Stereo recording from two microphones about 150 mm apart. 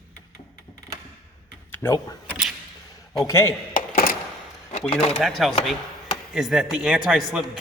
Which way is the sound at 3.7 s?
70° left (ahead or behind).